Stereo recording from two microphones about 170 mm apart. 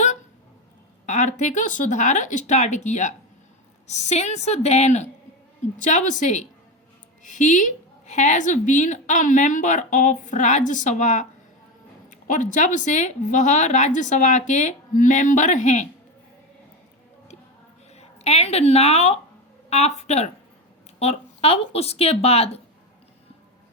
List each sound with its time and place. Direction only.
1.0 s a woman's voice: 45° left (ahead or behind)
17.9 s speech: 40° left (ahead or behind)